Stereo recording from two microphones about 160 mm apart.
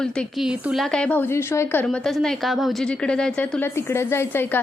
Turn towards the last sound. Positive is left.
turn(degrees=15)  # may be behind; listen again after turning